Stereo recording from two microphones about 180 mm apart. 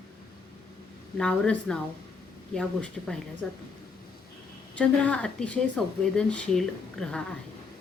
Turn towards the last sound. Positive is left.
turn(degrees=5)  # may be behind; listen again after turning